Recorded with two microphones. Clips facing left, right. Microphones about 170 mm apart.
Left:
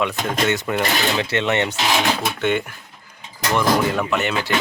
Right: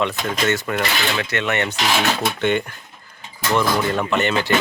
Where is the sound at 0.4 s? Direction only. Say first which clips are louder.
Even; 20° left (ahead or behind).